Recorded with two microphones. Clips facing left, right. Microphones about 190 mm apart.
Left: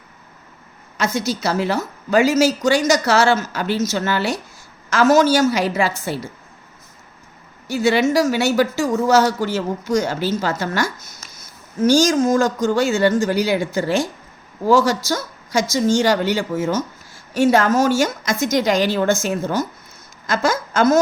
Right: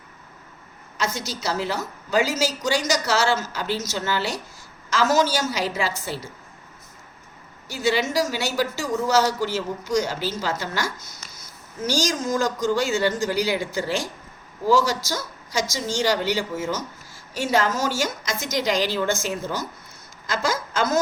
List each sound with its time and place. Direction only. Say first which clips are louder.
0.9 s a woman's voice: left 7 dB; 60° left (ahead or behind)
7.9 s a woman's voice: left 6 dB; 60° left (ahead or behind)
11.9 s a woman's voice: left 9 dB; 50° left (ahead or behind)